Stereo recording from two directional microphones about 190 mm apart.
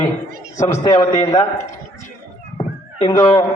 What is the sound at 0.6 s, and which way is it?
Speech, 15° left (ahead or behind).